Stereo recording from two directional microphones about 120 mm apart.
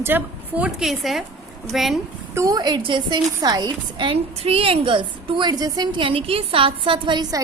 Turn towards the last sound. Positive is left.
turn(degrees=-45)  # may be behind; listen again after turning